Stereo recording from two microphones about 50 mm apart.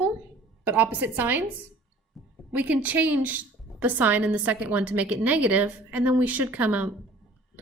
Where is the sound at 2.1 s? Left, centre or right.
Centre.